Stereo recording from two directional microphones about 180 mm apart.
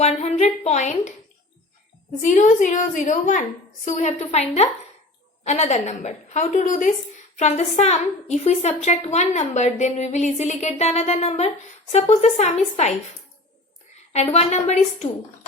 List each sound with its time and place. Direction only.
0.0 s a woman's voice: 35° left (ahead or behind)
2.2 s a woman's voice: 45° left (ahead or behind)
14.1 s a woman's voice: 35° left (ahead or behind)